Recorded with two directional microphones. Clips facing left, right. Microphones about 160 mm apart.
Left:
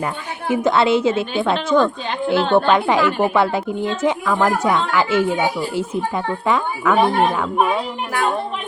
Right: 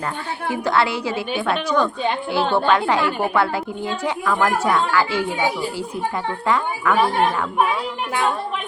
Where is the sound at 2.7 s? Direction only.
20° left (ahead or behind).